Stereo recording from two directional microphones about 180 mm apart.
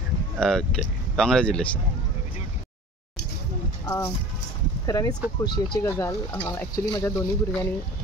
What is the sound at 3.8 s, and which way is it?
Speech, 15° left (ahead or behind).